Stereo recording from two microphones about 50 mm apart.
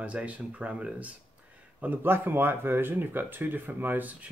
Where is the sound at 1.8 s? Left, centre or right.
Right.